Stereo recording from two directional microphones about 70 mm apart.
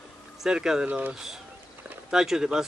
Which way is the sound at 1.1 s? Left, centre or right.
Centre.